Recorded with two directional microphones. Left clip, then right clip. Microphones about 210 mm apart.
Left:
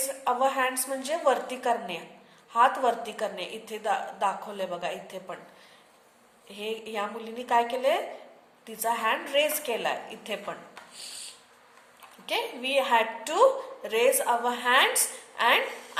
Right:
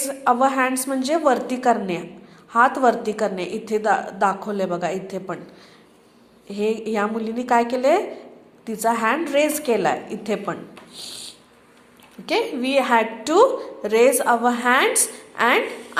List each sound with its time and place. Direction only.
0.0 s a woman's voice: 20° right (ahead or behind)
6.9 s a woman's voice: 20° right (ahead or behind)
12.2 s a woman's voice: 20° right (ahead or behind)